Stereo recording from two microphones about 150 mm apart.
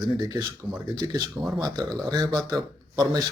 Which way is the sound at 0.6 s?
30° right (ahead or behind).